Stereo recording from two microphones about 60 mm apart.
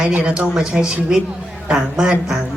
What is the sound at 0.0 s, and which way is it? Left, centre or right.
A woman's voice, centre.